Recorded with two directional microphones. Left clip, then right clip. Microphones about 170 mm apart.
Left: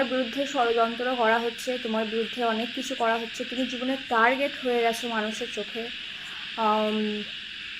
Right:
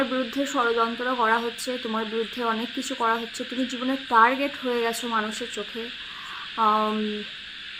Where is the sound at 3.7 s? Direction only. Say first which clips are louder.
Right 5 dB; 20° right (ahead or behind).